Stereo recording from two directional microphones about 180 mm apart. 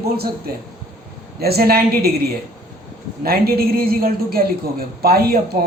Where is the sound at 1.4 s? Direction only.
60° right (ahead or behind).